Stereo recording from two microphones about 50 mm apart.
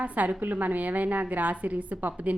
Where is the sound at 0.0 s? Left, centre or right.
Right.